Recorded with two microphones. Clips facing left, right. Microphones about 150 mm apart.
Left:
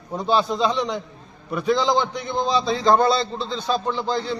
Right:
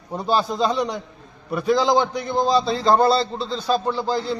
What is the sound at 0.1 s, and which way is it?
A man's voice, 5° right (ahead or behind).